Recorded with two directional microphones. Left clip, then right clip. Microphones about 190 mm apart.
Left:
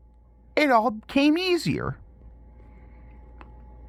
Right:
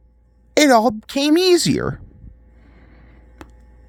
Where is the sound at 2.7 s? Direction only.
70° right (ahead or behind).